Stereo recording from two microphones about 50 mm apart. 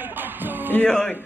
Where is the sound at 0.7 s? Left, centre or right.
Left.